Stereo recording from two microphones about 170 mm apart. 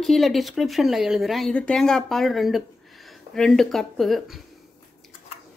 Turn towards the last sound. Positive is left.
turn(degrees=0)  # may be behind; listen again after turning